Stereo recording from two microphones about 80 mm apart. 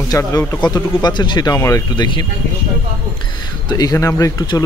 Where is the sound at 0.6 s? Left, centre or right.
Left.